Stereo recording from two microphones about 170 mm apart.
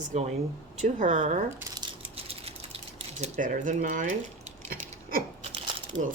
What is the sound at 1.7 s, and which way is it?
Mechanisms, 30° right (ahead or behind).